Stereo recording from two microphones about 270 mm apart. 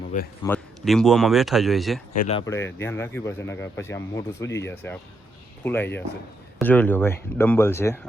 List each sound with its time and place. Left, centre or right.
0.4 s speech: centre
2.1 s speech: left
2.5 s speech: centre